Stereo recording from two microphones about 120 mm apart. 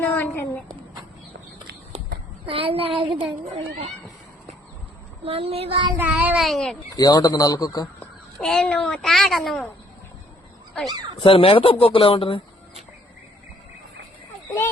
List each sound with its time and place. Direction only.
0.0 s a sound: 15° left (ahead or behind)
2.5 s speech: 50° right (ahead or behind)
5.2 s speech: 55° right (ahead or behind)
6.0 s speech: 15° right (ahead or behind)
6.4 s a child's voice: centre (ahead or behind)
6.9 s a man's voice: 35° left (ahead or behind)
8.4 s a child's voice: 5° left (ahead or behind)
11.2 s speech: 50° left (ahead or behind)